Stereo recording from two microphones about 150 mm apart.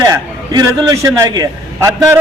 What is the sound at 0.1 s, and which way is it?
A man's voice, 25° right (ahead or behind).